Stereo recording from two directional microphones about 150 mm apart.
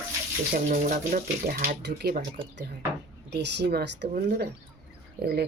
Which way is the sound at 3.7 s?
90° right.